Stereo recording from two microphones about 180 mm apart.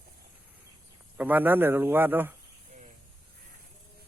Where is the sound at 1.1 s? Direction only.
10° right (ahead or behind).